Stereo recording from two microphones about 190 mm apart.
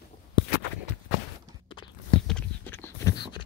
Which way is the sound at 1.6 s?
25° left (ahead or behind).